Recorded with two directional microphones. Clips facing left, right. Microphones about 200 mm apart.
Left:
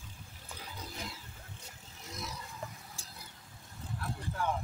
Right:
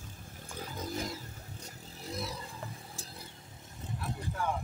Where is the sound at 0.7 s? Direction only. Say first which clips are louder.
Right 8 dB; 45° right (ahead or behind).